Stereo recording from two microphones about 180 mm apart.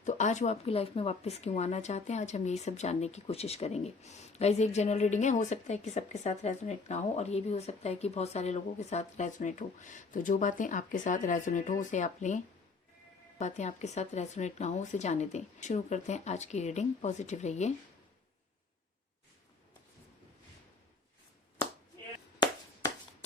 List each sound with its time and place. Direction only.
0.0 s speech: 40° left (ahead or behind)
13.4 s speech: 40° left (ahead or behind)